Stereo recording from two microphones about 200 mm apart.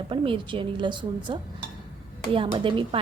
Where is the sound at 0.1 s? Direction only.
25° right (ahead or behind).